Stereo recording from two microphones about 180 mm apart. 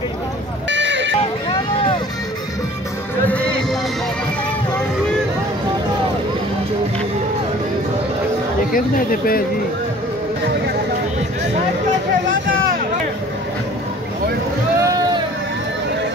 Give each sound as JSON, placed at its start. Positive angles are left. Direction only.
{"t": 0.7, "sound": "a sound", "side_deg": -90}
{"t": 3.3, "sound": "heart sounds", "side_deg": 5}
{"t": 8.7, "sound": "speech", "side_deg": 50}
{"t": 14.8, "sound": "vehicle", "side_deg": -20}